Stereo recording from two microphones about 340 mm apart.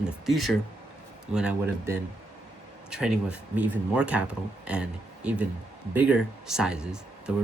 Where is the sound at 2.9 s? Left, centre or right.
Centre.